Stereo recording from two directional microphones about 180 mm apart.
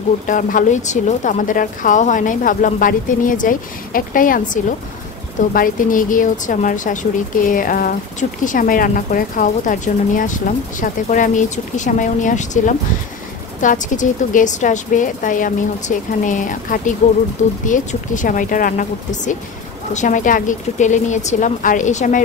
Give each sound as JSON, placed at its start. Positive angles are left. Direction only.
{"t": 0.3, "sound": "speech", "side_deg": 45}
{"t": 5.5, "sound": "speech", "side_deg": 50}